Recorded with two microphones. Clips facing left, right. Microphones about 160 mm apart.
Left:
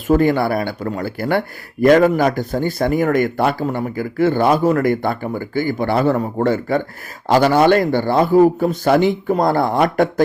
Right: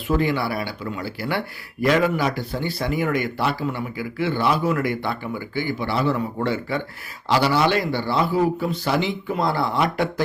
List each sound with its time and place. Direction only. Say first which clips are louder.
0.1 s speech: left 7 dB; 45° left (ahead or behind)